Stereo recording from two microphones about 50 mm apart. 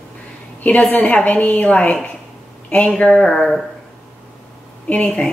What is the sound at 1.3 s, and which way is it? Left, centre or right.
A woman's voice, left.